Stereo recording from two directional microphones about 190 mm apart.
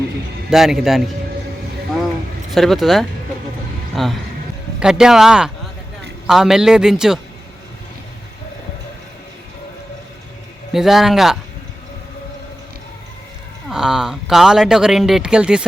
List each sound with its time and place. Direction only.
0.5 s speech: centre (ahead or behind)
2.5 s speech: centre (ahead or behind)
10.7 s speech: centre (ahead or behind)
13.7 s speech: 5° right (ahead or behind)